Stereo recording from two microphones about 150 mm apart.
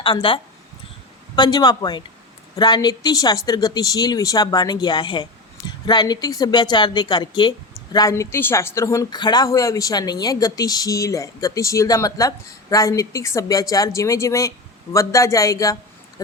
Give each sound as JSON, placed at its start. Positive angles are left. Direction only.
{"t": 0.0, "sound": "speech", "side_deg": 35}
{"t": 1.4, "sound": "a woman's voice", "side_deg": 25}